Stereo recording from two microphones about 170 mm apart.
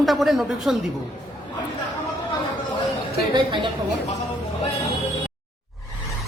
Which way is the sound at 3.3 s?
30° right (ahead or behind).